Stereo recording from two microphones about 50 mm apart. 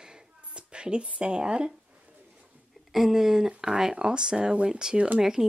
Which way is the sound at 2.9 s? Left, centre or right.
Centre.